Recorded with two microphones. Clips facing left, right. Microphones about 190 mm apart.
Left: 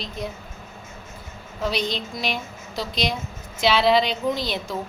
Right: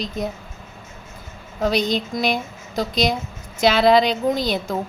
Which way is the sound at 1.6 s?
45° right (ahead or behind).